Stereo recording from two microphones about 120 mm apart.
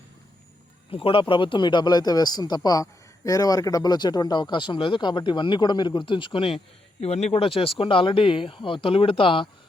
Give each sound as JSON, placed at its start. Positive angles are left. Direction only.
{"t": 0.9, "sound": "speech", "side_deg": 50}
{"t": 7.0, "sound": "speech", "side_deg": 65}